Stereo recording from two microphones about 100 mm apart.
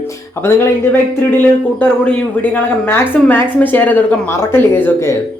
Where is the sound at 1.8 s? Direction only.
15° left (ahead or behind).